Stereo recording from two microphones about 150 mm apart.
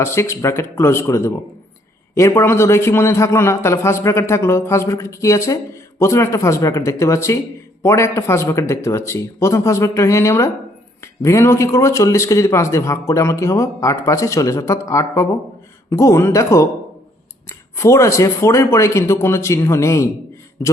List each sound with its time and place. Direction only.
0.0 s a man's voice: 20° left (ahead or behind)